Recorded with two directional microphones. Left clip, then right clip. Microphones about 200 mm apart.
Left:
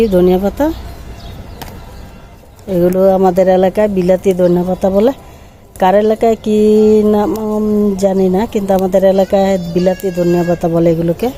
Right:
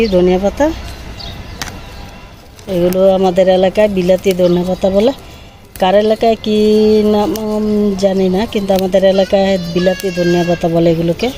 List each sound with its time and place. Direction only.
0.0 s speech: 20° left (ahead or behind)
2.6 s speech: 15° left (ahead or behind)
9.9 s speech: 5° right (ahead or behind)
10.3 s speech: 10° left (ahead or behind)